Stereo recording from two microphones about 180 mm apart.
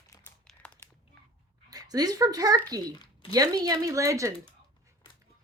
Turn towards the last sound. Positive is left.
turn(degrees=-15)  # may be behind; listen again after turning